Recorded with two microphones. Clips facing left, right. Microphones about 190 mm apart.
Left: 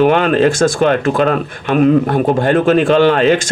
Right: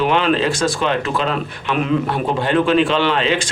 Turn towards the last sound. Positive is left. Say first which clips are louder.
# left 7 dB
turn(degrees=50)  # may be behind; listen again after turning